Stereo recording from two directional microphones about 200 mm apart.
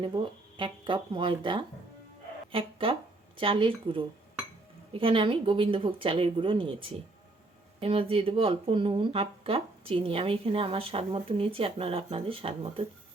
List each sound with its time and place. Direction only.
0.0 s speech: 25° right (ahead or behind)